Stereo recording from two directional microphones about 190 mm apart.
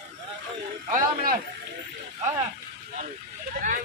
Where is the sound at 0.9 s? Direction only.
50° right (ahead or behind).